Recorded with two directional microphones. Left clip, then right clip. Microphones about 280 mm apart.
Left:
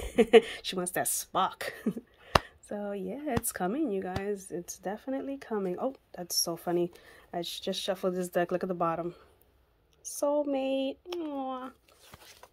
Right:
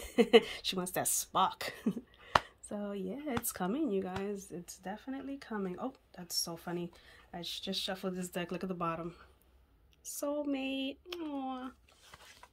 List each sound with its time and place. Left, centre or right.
0.1 s a woman's voice: centre